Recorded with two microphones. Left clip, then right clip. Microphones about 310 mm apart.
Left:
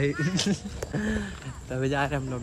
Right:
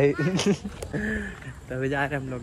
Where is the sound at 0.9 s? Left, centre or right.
Centre.